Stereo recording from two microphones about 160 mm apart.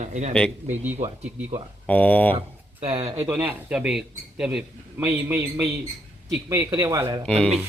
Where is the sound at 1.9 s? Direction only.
10° left (ahead or behind).